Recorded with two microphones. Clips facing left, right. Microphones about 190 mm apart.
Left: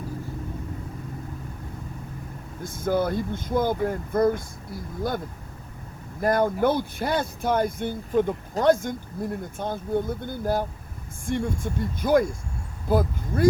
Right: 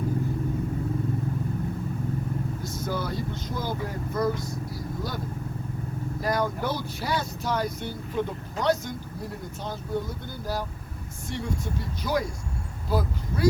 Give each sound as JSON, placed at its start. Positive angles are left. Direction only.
{"t": 2.6, "sound": "speech", "side_deg": 50}
{"t": 6.2, "sound": "speech", "side_deg": 55}